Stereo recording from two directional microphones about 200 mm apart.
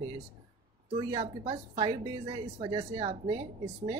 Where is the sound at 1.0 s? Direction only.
25° right (ahead or behind).